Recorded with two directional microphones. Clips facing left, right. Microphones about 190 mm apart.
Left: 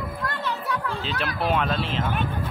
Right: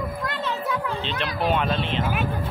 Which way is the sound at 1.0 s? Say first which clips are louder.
Right 1 dB; 5° left (ahead or behind).